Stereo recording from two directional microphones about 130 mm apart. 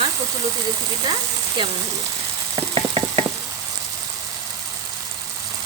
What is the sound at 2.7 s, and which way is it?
Ratchet, 45° right (ahead or behind).